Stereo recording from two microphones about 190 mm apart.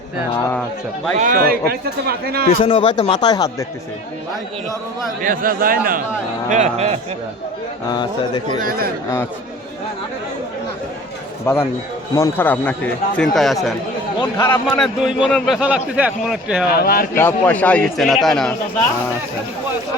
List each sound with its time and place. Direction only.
1.1 s a man's voice: 45° right (ahead or behind)
2.5 s speech: 30° left (ahead or behind)
5.2 s a man's voice: 45° right (ahead or behind)
6.5 s speech: 35° right (ahead or behind)
7.9 s speech: 20° left (ahead or behind)
11.5 s a man's voice: 15° left (ahead or behind)
14.2 s a man's voice: 15° left (ahead or behind)
14.8 s a man's voice: centre (ahead or behind)
16.6 s speech: 50° left (ahead or behind)
17.2 s a man's voice: 10° left (ahead or behind)